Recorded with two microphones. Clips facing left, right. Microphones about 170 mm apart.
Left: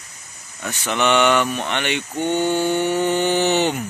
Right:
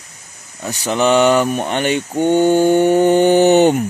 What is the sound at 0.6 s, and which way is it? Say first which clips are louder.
Speech: right 5 dB; 35° right (ahead or behind).